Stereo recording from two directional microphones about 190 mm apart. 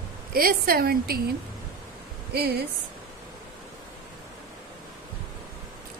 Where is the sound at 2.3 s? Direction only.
55° right (ahead or behind).